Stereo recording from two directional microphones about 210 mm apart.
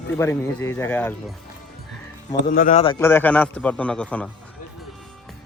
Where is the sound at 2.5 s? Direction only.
40° left (ahead or behind).